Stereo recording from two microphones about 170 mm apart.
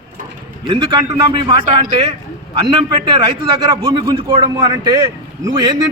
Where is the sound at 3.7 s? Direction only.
25° right (ahead or behind).